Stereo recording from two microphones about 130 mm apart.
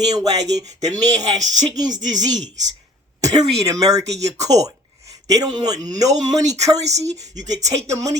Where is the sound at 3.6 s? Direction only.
25° right (ahead or behind).